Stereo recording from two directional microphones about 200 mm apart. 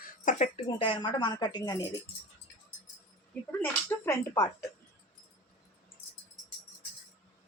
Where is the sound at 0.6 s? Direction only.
25° left (ahead or behind).